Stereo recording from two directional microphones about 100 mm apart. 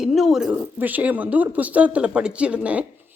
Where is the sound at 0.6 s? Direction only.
20° right (ahead or behind).